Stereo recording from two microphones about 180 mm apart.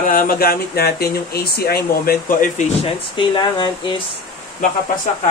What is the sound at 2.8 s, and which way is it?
Speech, 25° left (ahead or behind).